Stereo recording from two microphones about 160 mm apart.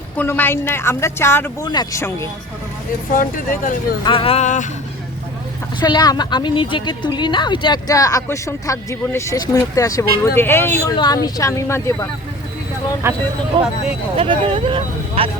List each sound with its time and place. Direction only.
0.2 s speech: 10° left (ahead or behind)
1.6 s a woman's voice: 25° left (ahead or behind)
3.1 s speech: 60° left (ahead or behind)
4.0 s speech: 35° left (ahead or behind); by 4.7 s 50° left (ahead or behind)
5.8 s a woman's voice: 25° left (ahead or behind)
10.9 s a woman's voice: 25° left (ahead or behind)
13.0 s speech: 15° right (ahead or behind)
13.5 s speech: 35° right (ahead or behind)